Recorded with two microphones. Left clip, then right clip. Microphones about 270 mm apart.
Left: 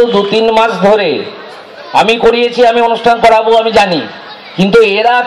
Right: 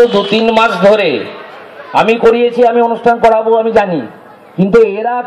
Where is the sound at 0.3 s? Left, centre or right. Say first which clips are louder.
Left 1 dB; right.